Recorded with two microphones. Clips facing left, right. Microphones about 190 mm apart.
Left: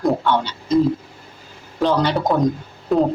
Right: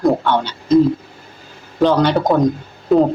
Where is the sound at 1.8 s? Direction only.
Centre (ahead or behind).